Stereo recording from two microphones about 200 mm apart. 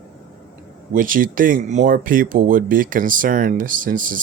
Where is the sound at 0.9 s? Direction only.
45° right (ahead or behind).